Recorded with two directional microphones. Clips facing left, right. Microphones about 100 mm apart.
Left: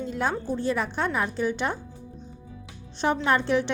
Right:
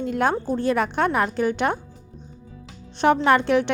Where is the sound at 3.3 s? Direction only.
70° right (ahead or behind).